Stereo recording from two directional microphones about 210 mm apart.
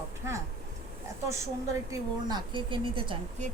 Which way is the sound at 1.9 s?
20° right (ahead or behind).